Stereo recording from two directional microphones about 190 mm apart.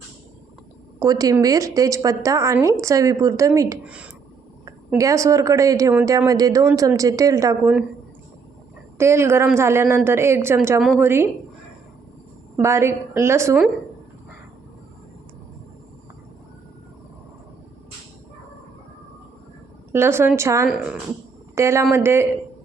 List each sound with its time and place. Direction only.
0.9 s a woman's voice: 20° right (ahead or behind)
3.8 s a woman's voice: 5° right (ahead or behind)
4.9 s a woman's voice: 15° right (ahead or behind)
7.6 s a woman's voice: 5° right (ahead or behind)
9.0 s a woman's voice: 15° right (ahead or behind)
10.8 s speech: centre (ahead or behind)
11.0 s a woman's voice: 15° right (ahead or behind)
12.5 s a woman's voice: 15° right (ahead or behind)
19.9 s a woman's voice: 15° right (ahead or behind)